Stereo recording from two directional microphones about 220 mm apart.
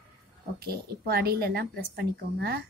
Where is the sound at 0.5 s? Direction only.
45° right (ahead or behind).